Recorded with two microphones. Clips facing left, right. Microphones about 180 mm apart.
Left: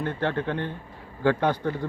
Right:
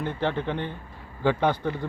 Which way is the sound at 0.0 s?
15° right (ahead or behind).